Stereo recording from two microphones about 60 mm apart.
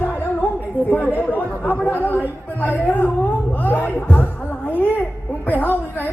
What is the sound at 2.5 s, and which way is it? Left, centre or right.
Music, left.